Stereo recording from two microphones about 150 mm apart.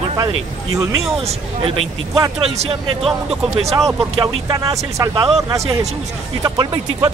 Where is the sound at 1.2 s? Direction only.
40° right (ahead or behind).